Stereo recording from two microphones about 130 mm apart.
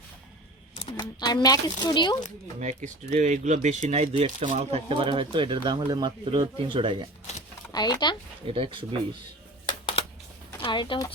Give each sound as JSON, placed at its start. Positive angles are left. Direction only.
{"t": 0.9, "sound": "speech", "side_deg": 30}
{"t": 2.6, "sound": "speech", "side_deg": -65}
{"t": 5.0, "sound": "speech", "side_deg": -40}
{"t": 7.7, "sound": "speech", "side_deg": 30}
{"t": 8.4, "sound": "speech", "side_deg": -45}
{"t": 9.6, "sound": "a sound", "side_deg": 40}
{"t": 10.6, "sound": "speech", "side_deg": 40}